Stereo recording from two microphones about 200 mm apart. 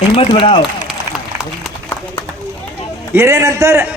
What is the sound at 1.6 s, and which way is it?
Run, 5° left (ahead or behind).